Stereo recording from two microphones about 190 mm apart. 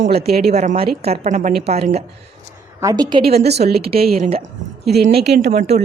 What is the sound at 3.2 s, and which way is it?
A woman's voice, 55° right (ahead or behind).